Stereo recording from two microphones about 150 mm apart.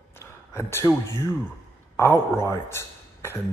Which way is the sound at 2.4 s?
15° left (ahead or behind).